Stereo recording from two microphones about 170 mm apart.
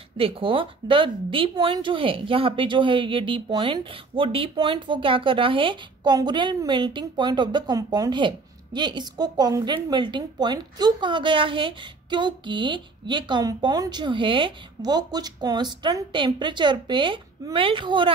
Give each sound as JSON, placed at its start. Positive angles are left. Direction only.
{"t": 0.2, "sound": "a woman's voice", "side_deg": -30}